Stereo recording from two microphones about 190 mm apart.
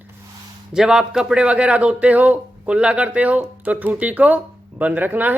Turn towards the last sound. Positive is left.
turn(degrees=-10)  # may be behind; listen again after turning